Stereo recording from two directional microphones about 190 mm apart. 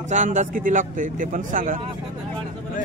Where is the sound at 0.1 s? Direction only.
40° right (ahead or behind).